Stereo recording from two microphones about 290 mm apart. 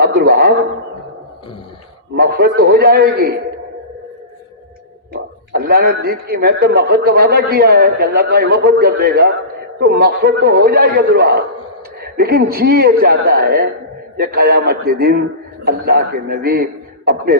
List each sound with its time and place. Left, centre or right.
0.0 s a man's voice: right
2.1 s speech: right
5.1 s speech: right